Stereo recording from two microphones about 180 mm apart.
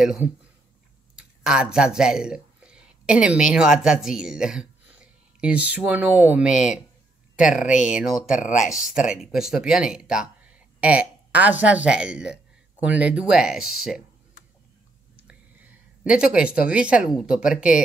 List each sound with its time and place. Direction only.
0.0 s speech: 5° right (ahead or behind)
8.3 s speech: 45° left (ahead or behind)
8.6 s speech: 5° right (ahead or behind)
15.1 s speech: 10° right (ahead or behind)